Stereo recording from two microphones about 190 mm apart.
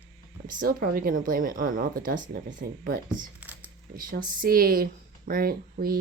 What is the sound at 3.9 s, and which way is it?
Speech, 45° right (ahead or behind).